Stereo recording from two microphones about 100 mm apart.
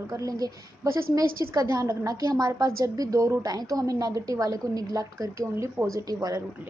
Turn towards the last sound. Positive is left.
turn(degrees=-40)  # may be behind; listen again after turning